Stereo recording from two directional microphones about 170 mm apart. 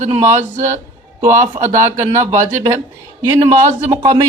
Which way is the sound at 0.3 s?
45° right (ahead or behind).